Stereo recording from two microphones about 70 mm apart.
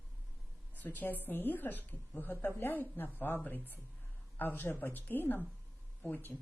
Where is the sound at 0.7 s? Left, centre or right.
Left.